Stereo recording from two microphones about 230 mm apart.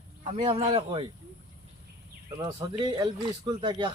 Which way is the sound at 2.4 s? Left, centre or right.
Centre.